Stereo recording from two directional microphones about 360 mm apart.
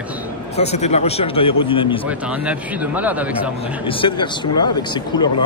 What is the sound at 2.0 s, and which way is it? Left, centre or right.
A man's voice, centre.